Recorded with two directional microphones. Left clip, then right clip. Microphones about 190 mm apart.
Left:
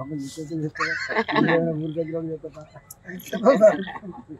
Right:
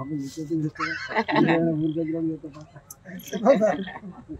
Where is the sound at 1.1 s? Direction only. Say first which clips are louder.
Even; centre (ahead or behind).